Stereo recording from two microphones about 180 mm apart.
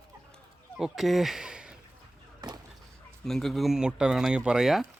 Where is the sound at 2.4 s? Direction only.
25° right (ahead or behind).